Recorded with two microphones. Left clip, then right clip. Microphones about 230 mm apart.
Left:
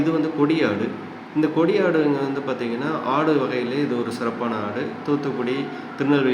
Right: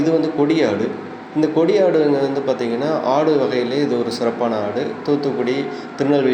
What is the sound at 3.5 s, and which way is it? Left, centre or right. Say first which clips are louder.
Speech: right 5 dB; centre.